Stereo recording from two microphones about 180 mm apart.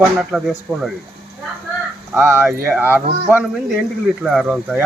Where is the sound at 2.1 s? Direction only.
10° right (ahead or behind).